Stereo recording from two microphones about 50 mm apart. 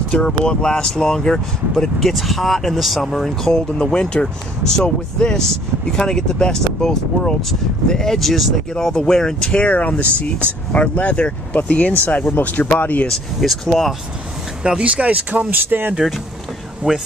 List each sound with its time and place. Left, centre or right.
0.1 s speech: centre
2.0 s speech: centre
3.5 s speech: centre
8.9 s speech: centre
9.6 s speech: left
13.4 s speech: centre
14.6 s speech: centre
16.0 s speech: centre
16.8 s speech: right